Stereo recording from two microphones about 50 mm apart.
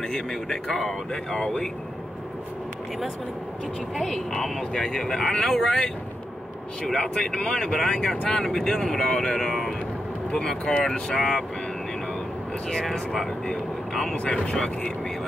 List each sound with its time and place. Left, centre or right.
0.1 s speech: centre
3.9 s speech: centre
6.9 s speech: centre
10.9 s speech: centre
13.1 s speech: centre
14.1 s speech: left